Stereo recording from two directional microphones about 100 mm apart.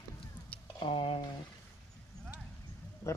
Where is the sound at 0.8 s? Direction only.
65° left (ahead or behind).